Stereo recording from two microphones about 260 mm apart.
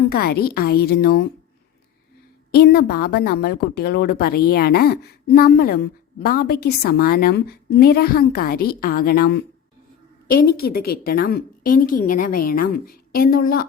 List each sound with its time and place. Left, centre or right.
0.1 s a woman's voice: left
2.5 s a woman's voice: left
10.4 s a woman's voice: left